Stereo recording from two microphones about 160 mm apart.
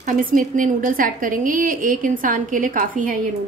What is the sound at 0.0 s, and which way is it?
A woman's voice, 55° right (ahead or behind).